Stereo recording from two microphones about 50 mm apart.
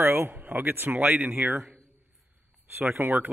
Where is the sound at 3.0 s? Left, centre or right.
Right.